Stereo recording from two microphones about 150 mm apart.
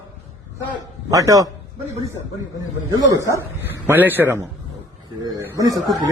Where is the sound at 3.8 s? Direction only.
15° right (ahead or behind).